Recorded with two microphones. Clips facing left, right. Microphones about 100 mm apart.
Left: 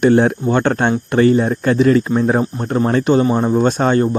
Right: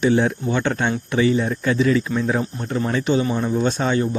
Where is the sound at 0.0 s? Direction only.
55° left (ahead or behind).